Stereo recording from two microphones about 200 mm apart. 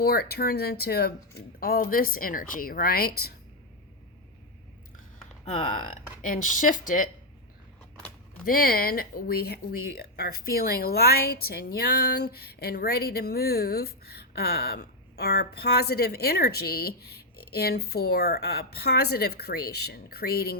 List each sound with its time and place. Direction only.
0.0 s speech: 50° left (ahead or behind)
6.2 s speech: 40° left (ahead or behind)
8.4 s speech: 45° left (ahead or behind)